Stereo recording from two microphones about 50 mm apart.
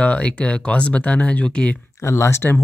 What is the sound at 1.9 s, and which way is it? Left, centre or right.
Speech, left.